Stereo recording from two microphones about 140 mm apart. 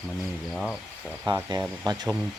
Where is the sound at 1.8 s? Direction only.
25° right (ahead or behind).